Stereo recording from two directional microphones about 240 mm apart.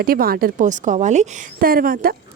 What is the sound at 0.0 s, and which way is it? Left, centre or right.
A woman's voice, right.